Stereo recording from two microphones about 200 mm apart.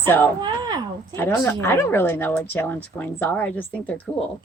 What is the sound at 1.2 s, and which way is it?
A woman's voice, 10° left (ahead or behind).